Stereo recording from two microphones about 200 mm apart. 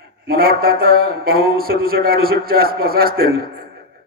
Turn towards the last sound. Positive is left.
turn(degrees=-50)  # may be behind; listen again after turning